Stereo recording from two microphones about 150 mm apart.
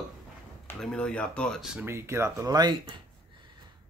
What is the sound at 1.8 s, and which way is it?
Speech, 15° right (ahead or behind).